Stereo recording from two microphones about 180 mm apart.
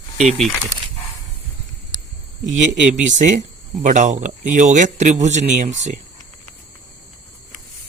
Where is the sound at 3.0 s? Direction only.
40° right (ahead or behind).